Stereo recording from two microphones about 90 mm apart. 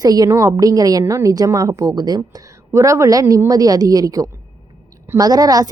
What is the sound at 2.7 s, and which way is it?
A woman's voice, 35° right (ahead or behind).